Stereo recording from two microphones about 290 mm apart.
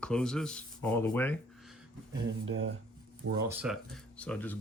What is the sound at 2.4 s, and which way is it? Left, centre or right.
Speech, right.